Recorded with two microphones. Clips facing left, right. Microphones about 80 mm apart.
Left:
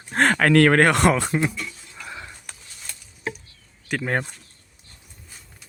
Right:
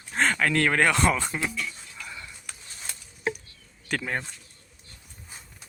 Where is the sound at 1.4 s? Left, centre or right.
Left.